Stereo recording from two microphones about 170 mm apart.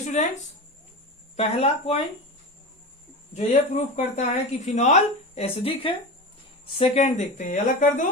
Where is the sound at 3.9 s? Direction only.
45° left (ahead or behind).